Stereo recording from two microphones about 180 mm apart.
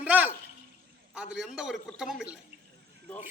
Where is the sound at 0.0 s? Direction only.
10° right (ahead or behind).